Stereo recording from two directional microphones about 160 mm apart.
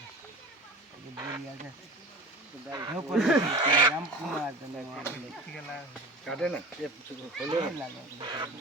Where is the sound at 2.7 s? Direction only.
25° right (ahead or behind).